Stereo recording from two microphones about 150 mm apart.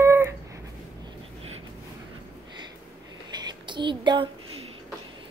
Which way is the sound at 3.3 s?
30° right (ahead or behind).